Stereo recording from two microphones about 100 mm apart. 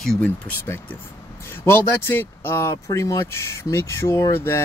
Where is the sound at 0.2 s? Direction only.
15° left (ahead or behind).